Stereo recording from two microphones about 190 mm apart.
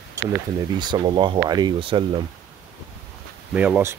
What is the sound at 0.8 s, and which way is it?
Speech, 25° right (ahead or behind).